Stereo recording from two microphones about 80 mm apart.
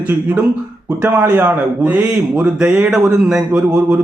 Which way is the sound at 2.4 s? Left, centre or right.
Centre.